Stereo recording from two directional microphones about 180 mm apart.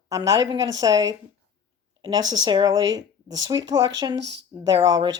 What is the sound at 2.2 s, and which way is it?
Speech, 90° right.